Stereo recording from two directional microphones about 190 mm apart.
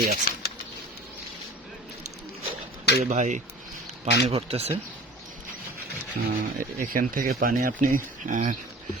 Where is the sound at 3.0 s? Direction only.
40° right (ahead or behind).